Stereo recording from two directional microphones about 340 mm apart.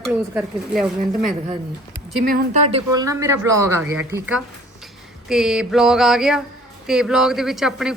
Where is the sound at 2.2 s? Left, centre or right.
Right.